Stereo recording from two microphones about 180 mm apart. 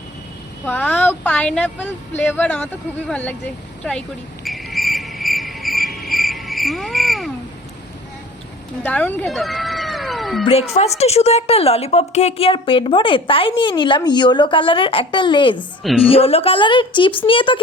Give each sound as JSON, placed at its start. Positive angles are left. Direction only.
{"t": 0.6, "sound": "speech", "side_deg": 10}
{"t": 4.4, "sound": "cricket", "side_deg": 0}
{"t": 8.8, "sound": "cat", "side_deg": 10}
{"t": 10.4, "sound": "a woman's voice", "side_deg": 35}
{"t": 15.5, "sound": "a woman's voice", "side_deg": 0}
{"t": 16.0, "sound": "a woman's voice", "side_deg": 30}